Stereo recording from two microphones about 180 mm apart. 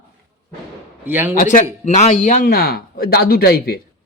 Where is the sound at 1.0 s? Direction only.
10° right (ahead or behind).